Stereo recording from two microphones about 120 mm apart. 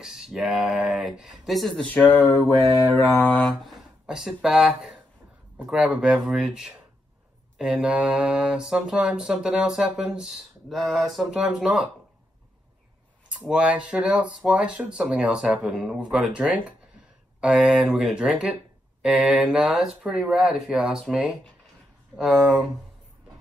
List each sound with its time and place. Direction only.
0.0 s speech: 5° right (ahead or behind)
2.0 s mantra: 15° left (ahead or behind)
2.4 s mantra: 30° left (ahead or behind)
2.9 s mantra: 15° left (ahead or behind)
3.4 s speech: centre (ahead or behind)
13.4 s speech: 10° right (ahead or behind)